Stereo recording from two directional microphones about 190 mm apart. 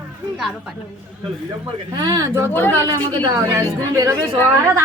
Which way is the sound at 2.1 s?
15° right (ahead or behind).